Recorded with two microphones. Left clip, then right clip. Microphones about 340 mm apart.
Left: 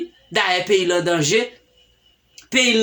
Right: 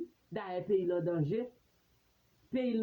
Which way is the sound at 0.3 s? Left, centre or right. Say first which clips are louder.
Left 16 dB; right.